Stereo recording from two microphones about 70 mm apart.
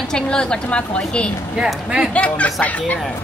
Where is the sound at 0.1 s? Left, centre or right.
Centre.